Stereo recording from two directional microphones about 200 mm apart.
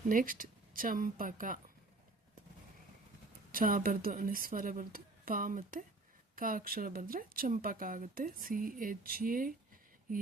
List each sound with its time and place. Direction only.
0.1 s a woman's voice: 45° right (ahead or behind)
3.5 s a woman's voice: 45° right (ahead or behind)